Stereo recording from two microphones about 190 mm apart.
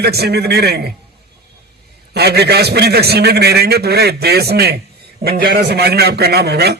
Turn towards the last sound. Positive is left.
turn(degrees=-55)  # may be behind; listen again after turning